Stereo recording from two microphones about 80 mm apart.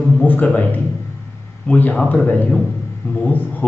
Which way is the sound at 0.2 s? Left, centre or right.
Left.